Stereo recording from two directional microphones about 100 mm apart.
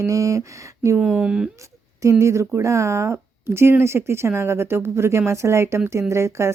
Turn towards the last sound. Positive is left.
turn(degrees=-25)  # may be behind; listen again after turning